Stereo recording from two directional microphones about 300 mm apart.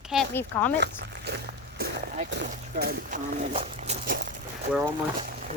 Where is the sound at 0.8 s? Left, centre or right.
Right.